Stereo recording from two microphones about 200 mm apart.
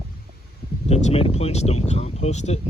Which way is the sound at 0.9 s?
30° left (ahead or behind).